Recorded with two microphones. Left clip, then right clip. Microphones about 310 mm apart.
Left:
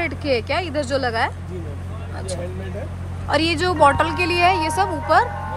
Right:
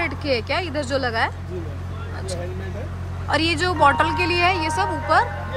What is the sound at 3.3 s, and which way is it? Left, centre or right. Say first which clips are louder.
Speech: left 1 dB; centre.